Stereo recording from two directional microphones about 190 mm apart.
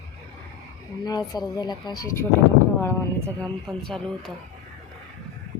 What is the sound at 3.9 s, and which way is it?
Speech, centre (ahead or behind).